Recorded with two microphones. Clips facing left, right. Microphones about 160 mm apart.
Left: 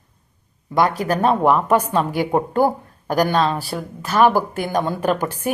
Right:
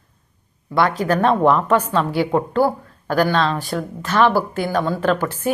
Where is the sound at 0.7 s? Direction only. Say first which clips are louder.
Right 1 dB; 15° left (ahead or behind).